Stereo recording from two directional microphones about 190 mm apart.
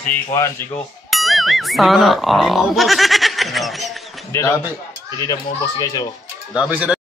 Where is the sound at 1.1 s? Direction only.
Centre (ahead or behind).